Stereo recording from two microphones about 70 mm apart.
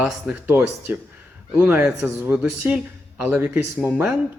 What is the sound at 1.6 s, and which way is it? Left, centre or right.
Speech, right.